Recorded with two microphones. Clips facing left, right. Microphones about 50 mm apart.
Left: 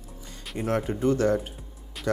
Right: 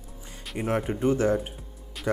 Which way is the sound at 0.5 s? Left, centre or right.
Centre.